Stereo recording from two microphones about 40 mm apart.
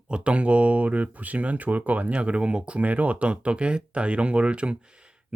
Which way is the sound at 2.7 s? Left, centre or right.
Right.